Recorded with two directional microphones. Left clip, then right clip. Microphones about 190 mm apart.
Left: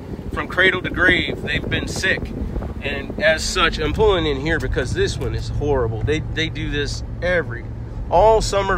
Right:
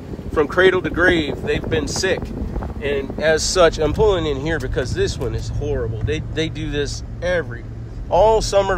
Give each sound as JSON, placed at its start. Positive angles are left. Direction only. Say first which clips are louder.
{"t": 0.3, "sound": "speech", "louder": "right 2 dB", "side_deg": -45}
{"t": 3.3, "sound": "speech", "louder": "right 4 dB", "side_deg": -40}
{"t": 5.6, "sound": "speech", "louder": "left 5 dB", "side_deg": 0}
{"t": 6.3, "sound": "speech", "louder": "even", "side_deg": -20}